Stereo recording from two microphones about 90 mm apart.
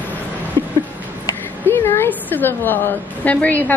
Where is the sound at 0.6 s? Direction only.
30° left (ahead or behind).